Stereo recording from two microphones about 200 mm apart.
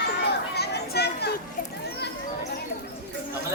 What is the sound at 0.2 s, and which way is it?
Chatter, 55° left (ahead or behind).